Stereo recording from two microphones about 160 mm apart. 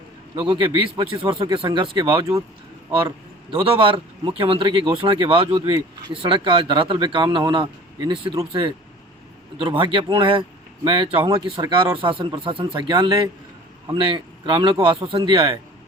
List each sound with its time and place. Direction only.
0.3 s speech: 30° right (ahead or behind)
3.5 s speech: 35° right (ahead or behind)